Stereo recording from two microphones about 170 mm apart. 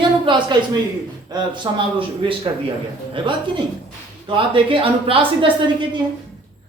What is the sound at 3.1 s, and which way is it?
Speech, 30° right (ahead or behind).